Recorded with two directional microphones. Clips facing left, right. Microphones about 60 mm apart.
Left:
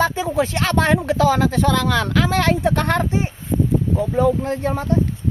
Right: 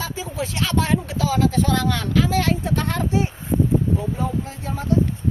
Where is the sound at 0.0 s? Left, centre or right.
Left.